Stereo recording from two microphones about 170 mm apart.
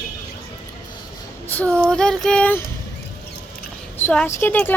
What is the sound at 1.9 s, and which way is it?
Speech, 5° left (ahead or behind).